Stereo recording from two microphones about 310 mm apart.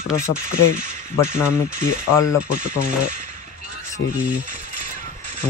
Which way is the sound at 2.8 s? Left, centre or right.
Right.